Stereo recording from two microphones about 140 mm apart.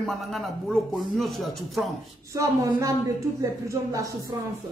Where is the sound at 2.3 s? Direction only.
20° right (ahead or behind).